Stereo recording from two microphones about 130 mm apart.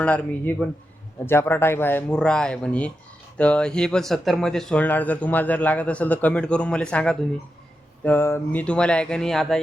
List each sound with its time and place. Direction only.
0.0 s speech: 10° left (ahead or behind)
8.0 s speech: 20° left (ahead or behind)
8.6 s speech: 10° left (ahead or behind)